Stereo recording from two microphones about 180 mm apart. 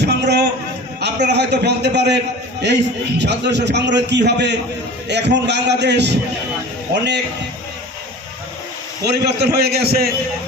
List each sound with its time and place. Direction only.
0.0 s a sound: 70° right (ahead or behind)
1.0 s a man's voice: 70° right (ahead or behind)
9.0 s a man's voice: 65° right (ahead or behind)